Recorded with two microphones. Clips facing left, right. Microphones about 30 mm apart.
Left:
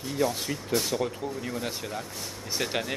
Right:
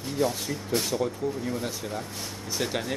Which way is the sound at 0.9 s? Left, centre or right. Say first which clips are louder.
Right 2 dB; centre.